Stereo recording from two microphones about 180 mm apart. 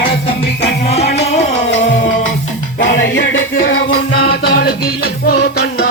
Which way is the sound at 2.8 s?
90° left.